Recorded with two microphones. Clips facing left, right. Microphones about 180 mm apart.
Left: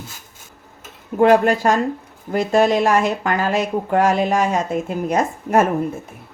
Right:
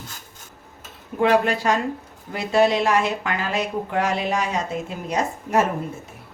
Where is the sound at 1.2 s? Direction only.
45° left (ahead or behind).